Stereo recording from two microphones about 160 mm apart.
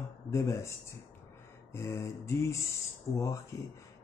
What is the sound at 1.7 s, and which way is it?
Speech, 15° left (ahead or behind).